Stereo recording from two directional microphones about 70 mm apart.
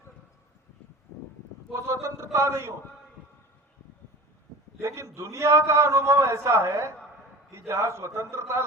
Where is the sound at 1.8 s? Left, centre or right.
Right.